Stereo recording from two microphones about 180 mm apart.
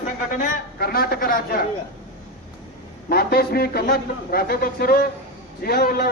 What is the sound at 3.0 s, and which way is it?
A man's voice, 60° left (ahead or behind).